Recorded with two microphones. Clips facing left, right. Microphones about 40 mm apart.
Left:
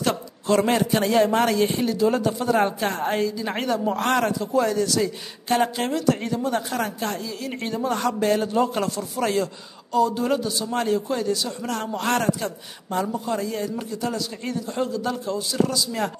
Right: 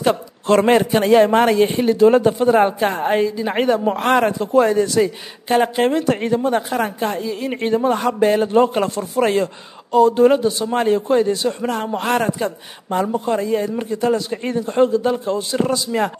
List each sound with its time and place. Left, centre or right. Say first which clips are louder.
0.5 s a man's voice: right 6 dB; right